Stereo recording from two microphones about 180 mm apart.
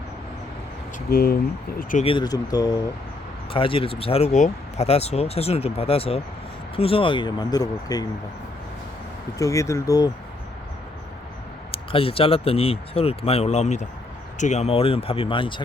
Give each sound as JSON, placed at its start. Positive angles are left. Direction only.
{"t": 1.1, "sound": "speech", "side_deg": 60}
{"t": 1.8, "sound": "speech", "side_deg": 45}
{"t": 2.0, "sound": "speech", "side_deg": 25}
{"t": 9.4, "sound": "speech", "side_deg": 15}
{"t": 11.7, "sound": "speech", "side_deg": 30}